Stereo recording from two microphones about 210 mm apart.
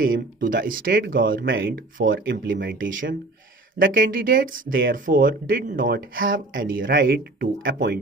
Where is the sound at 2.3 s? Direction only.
55° right (ahead or behind).